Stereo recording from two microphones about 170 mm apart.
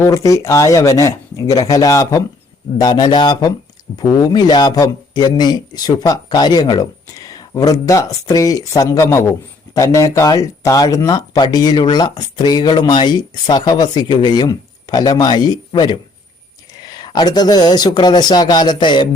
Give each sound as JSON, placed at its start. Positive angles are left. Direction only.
{"t": 0.0, "sound": "speech", "side_deg": 20}